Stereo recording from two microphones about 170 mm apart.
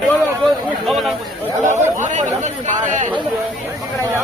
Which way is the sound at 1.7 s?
45° right (ahead or behind).